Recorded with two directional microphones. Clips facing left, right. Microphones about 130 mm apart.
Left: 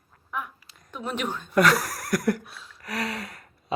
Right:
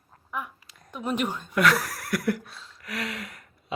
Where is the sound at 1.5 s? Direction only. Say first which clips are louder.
Left 3 dB; 40° left (ahead or behind).